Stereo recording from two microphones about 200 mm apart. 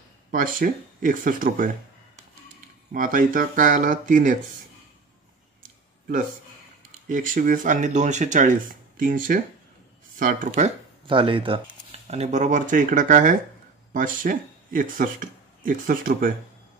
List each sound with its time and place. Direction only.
0.3 s speech: 45° right (ahead or behind)
2.9 s speech: 40° right (ahead or behind)
6.9 s speech: 40° right (ahead or behind)
11.1 s speech: 25° right (ahead or behind); by 16.3 s 45° right (ahead or behind)